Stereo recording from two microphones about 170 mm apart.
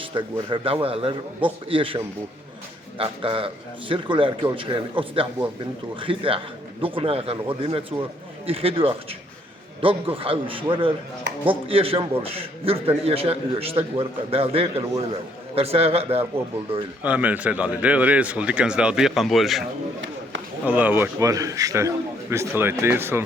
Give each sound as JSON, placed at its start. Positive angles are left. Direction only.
{"t": 0.0, "sound": "a man's voice", "side_deg": -30}
{"t": 17.0, "sound": "speech", "side_deg": -10}
{"t": 20.7, "sound": "speech", "side_deg": -10}